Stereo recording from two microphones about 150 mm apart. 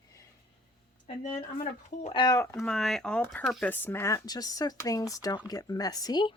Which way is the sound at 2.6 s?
Centre (ahead or behind).